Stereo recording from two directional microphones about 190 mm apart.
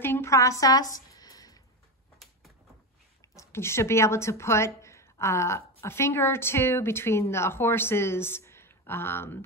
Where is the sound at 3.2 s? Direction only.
15° left (ahead or behind).